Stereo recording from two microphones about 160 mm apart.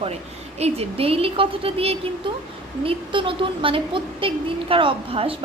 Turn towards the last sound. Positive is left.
turn(degrees=-35)  # may be behind; listen again after turning